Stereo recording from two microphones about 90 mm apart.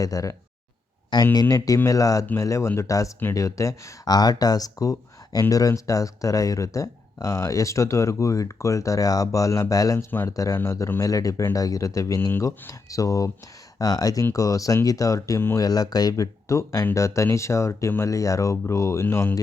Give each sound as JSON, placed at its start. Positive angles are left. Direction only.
{"t": 0.0, "sound": "speech", "side_deg": 40}
{"t": 11.0, "sound": "speech", "side_deg": 40}